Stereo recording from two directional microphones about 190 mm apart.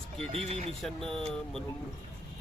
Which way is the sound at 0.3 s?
30° right (ahead or behind).